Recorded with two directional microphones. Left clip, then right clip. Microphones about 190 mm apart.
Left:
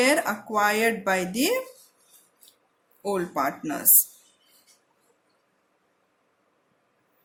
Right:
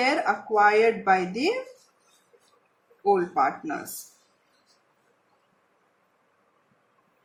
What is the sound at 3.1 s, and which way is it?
Speech, 70° left (ahead or behind).